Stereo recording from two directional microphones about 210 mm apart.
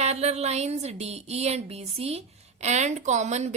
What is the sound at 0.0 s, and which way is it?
A woman's voice, 30° right (ahead or behind).